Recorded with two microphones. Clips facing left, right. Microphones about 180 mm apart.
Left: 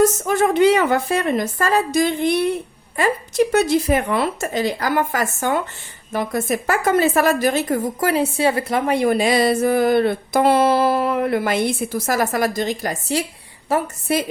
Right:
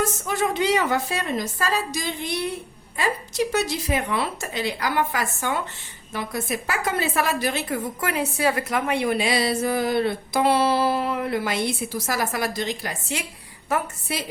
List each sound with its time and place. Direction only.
0.0 s a woman's voice: 50° left (ahead or behind)
13.7 s a woman's voice: 30° left (ahead or behind)